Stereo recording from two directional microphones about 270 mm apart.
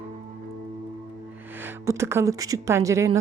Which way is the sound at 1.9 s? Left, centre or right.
Centre.